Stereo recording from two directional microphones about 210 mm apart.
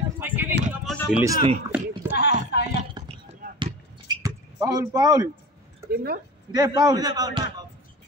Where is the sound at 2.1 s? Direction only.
50° left (ahead or behind).